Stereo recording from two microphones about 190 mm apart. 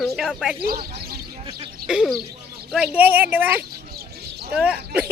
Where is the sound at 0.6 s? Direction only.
55° right (ahead or behind).